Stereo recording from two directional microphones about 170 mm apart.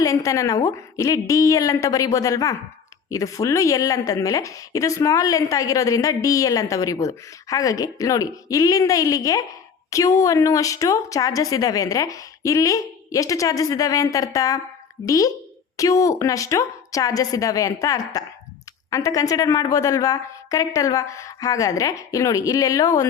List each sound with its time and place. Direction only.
0.0 s speech: 20° left (ahead or behind)